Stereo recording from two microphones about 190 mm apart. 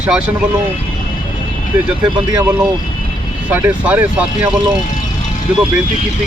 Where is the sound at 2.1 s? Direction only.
15° right (ahead or behind).